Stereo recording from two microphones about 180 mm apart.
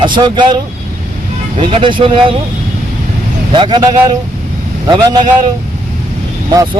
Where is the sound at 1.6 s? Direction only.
30° right (ahead or behind).